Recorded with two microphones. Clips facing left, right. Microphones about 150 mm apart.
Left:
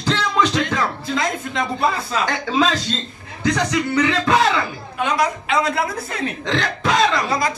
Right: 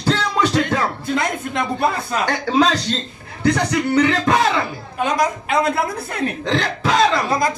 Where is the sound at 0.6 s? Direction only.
55° right (ahead or behind).